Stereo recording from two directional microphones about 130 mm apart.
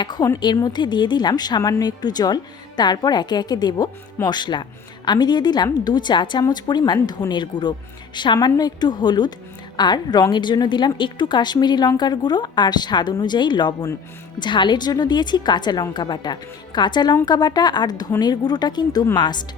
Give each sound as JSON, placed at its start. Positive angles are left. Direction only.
{"t": 0.0, "sound": "speech", "side_deg": 35}